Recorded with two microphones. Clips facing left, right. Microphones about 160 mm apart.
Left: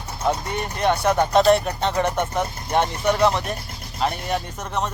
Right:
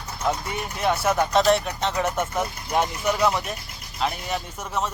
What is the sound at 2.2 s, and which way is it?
Speech, 30° left (ahead or behind).